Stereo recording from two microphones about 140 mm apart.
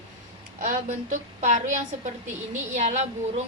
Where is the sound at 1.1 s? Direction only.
60° right (ahead or behind).